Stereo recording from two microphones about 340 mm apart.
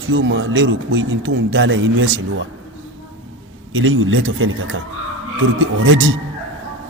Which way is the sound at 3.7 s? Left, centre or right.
Right.